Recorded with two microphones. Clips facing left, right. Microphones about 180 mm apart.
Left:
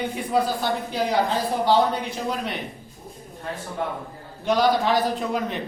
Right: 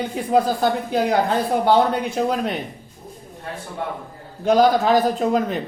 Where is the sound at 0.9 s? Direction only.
50° right (ahead or behind).